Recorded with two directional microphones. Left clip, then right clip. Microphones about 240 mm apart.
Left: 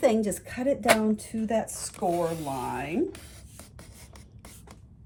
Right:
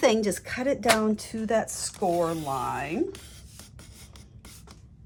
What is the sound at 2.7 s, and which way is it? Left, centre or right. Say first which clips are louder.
Ratchet: right 2 dB; right.